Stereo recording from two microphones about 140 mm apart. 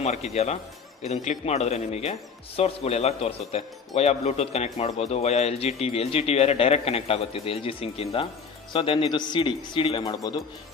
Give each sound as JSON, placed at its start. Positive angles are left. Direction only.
{"t": 0.0, "sound": "a man's voice", "side_deg": 50}
{"t": 10.0, "sound": "speech", "side_deg": 25}